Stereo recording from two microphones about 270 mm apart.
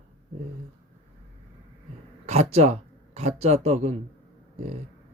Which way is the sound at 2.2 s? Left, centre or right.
Right.